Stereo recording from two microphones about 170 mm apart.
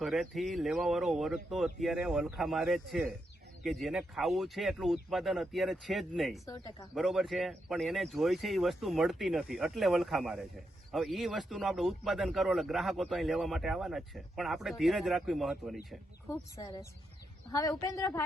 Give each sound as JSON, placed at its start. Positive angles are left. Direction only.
{"t": 0.0, "sound": "a man's voice", "side_deg": 0}
{"t": 6.4, "sound": "a woman's voice", "side_deg": 20}
{"t": 6.9, "sound": "a man's voice", "side_deg": 0}
{"t": 16.3, "sound": "a woman's voice", "side_deg": 20}